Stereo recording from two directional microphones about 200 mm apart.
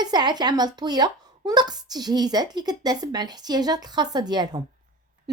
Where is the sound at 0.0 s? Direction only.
20° right (ahead or behind).